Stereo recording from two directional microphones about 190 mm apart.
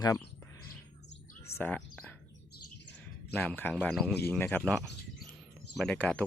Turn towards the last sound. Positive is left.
turn(degrees=10)  # may be behind; listen again after turning